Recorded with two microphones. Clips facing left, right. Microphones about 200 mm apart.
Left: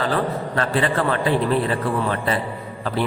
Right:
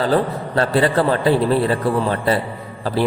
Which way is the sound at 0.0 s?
35° right (ahead or behind).